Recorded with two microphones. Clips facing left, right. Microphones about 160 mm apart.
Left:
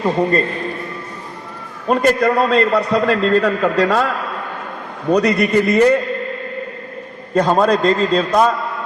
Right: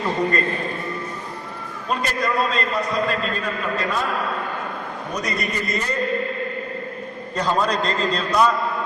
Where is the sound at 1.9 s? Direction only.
60° left (ahead or behind); by 4.1 s 80° left.